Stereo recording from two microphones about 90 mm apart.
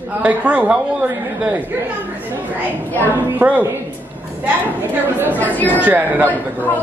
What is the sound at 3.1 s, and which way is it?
Speech, 20° right (ahead or behind).